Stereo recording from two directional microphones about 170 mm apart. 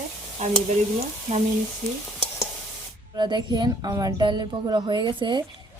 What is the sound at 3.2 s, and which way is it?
Speech, 25° right (ahead or behind).